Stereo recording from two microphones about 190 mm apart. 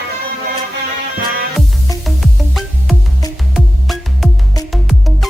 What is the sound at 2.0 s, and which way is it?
Music, centre (ahead or behind).